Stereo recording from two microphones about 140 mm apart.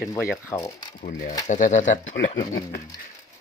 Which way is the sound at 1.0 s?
65° left (ahead or behind).